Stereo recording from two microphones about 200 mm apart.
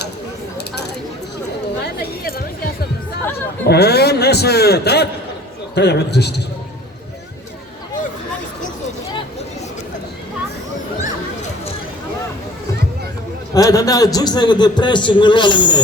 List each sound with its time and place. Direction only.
3.7 s a man's voice: 55° left (ahead or behind)
13.5 s a man's voice: 15° left (ahead or behind)